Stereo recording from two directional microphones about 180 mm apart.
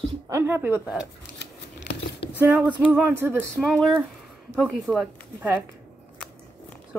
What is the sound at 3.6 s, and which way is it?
Speech, centre (ahead or behind).